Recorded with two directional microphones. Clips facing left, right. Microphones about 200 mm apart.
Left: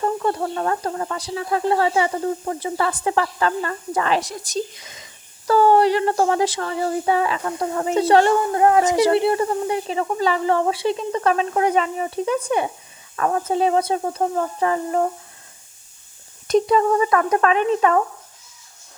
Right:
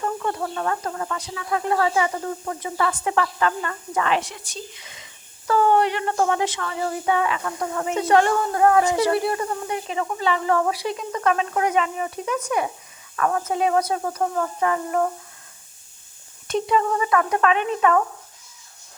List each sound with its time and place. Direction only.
0.0 s speech: 35° left (ahead or behind)
16.5 s speech: 40° left (ahead or behind)